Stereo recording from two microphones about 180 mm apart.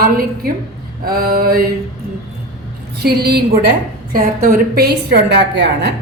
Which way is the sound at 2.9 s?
60° right (ahead or behind).